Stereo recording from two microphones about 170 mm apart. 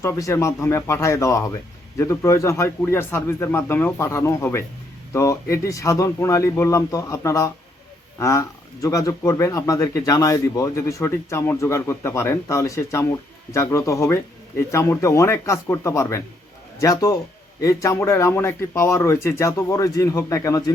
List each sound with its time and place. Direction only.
0.0 s a man's voice: 15° left (ahead or behind)